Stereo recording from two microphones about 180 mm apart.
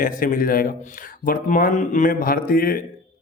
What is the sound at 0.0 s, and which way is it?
A man's voice, 50° left (ahead or behind).